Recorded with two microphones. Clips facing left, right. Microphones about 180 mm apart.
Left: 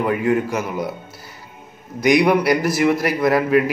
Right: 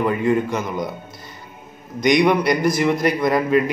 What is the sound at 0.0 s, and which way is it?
Speech, 5° left (ahead or behind).